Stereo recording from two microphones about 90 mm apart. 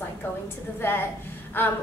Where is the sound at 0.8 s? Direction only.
25° left (ahead or behind).